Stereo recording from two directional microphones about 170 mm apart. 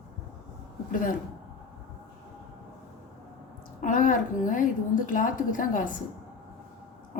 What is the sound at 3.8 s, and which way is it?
A woman's voice, 50° left (ahead or behind).